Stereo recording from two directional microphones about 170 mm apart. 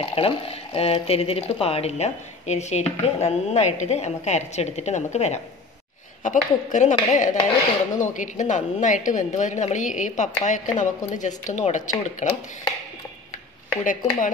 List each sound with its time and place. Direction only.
0.0 s a woman's voice: 35° left (ahead or behind)
13.8 s a woman's voice: 50° left (ahead or behind)